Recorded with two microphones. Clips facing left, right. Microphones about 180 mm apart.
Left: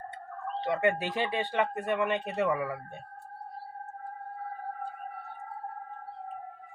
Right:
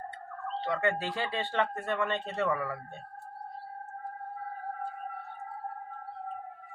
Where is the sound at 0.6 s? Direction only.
20° left (ahead or behind).